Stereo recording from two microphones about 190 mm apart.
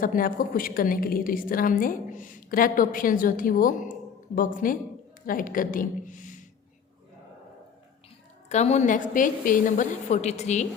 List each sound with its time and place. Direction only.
0.0 s a woman's voice: 45° left (ahead or behind)
8.4 s a woman's voice: 35° left (ahead or behind)